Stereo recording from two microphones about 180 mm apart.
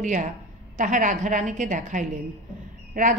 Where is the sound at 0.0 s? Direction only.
45° right (ahead or behind).